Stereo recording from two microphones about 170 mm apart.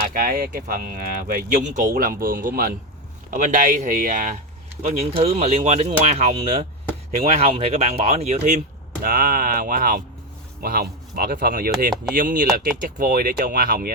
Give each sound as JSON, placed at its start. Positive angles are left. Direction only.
{"t": 0.1, "sound": "speech", "side_deg": -60}
{"t": 4.9, "sound": "speech", "side_deg": -35}
{"t": 9.0, "sound": "speech", "side_deg": -55}